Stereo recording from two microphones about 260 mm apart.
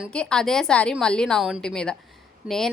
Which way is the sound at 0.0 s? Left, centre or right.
Centre.